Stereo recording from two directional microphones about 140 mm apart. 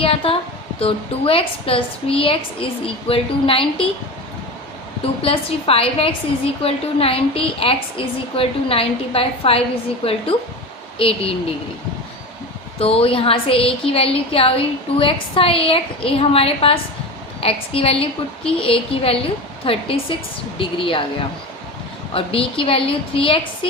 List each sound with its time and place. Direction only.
0.0 s a woman's voice: 40° left (ahead or behind)
5.0 s a woman's voice: 40° left (ahead or behind)
12.8 s a woman's voice: 45° left (ahead or behind)
22.1 s a woman's voice: 40° left (ahead or behind)